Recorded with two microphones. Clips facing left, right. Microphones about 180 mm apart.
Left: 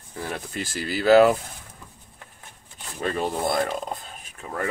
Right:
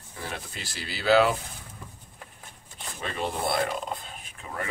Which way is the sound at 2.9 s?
45° left (ahead or behind).